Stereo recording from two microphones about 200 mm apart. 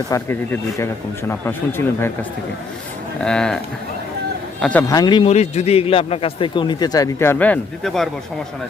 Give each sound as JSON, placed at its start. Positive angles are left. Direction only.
{"t": 0.1, "sound": "speech", "side_deg": 10}
{"t": 3.2, "sound": "speech", "side_deg": 5}
{"t": 4.6, "sound": "a man's voice", "side_deg": 10}